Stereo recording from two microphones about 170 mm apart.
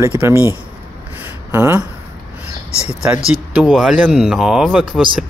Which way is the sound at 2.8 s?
5° right (ahead or behind).